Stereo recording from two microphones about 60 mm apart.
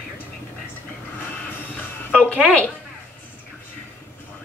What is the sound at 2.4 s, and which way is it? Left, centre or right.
Speech, centre.